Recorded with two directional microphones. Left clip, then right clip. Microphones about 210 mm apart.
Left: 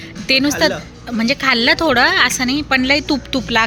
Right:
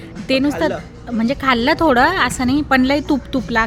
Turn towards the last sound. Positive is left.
turn(degrees=-10)  # may be behind; listen again after turning